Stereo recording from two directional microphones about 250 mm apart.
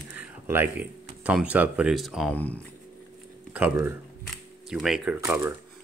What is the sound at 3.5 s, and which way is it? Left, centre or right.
Speech, centre.